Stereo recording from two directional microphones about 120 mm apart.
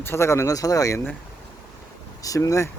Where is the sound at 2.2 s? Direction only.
30° left (ahead or behind).